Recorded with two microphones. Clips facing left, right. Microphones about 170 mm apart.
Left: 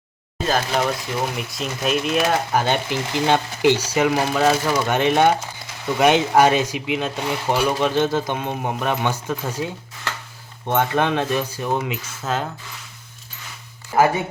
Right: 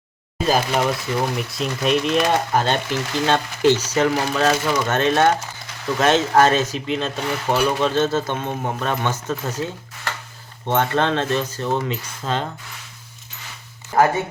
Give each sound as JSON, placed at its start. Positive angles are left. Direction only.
{"t": 0.4, "sound": "speech", "side_deg": -5}
{"t": 10.7, "sound": "speech", "side_deg": 15}